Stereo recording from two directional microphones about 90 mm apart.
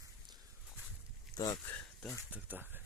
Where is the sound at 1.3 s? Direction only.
10° left (ahead or behind).